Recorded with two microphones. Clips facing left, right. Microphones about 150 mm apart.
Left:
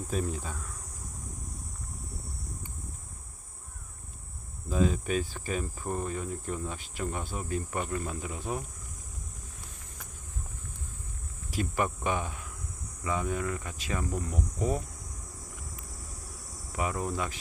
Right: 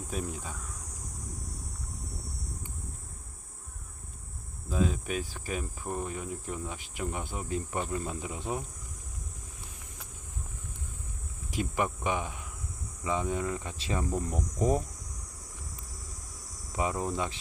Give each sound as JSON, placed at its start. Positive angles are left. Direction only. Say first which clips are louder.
{"t": 0.1, "sound": "speech", "louder": "left 4 dB", "side_deg": -10}
{"t": 4.7, "sound": "speech", "louder": "left 3 dB", "side_deg": 0}
{"t": 11.5, "sound": "speech", "louder": "even", "side_deg": -15}
{"t": 16.7, "sound": "speech", "louder": "right 1 dB", "side_deg": -25}